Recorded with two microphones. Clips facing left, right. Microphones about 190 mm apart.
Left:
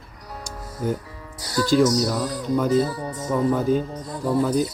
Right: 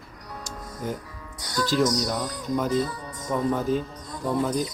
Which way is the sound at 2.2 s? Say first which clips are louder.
Left 4 dB; 30° left (ahead or behind).